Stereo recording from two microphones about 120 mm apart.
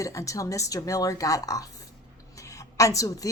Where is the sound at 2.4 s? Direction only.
25° left (ahead or behind).